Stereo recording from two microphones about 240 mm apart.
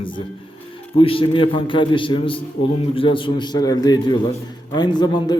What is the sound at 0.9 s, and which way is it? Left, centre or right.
A man's voice, left.